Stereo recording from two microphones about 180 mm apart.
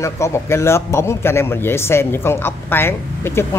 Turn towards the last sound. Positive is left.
turn(degrees=15)  # may be behind; listen again after turning